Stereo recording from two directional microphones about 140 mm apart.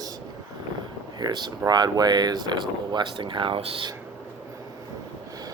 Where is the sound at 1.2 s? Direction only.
30° right (ahead or behind).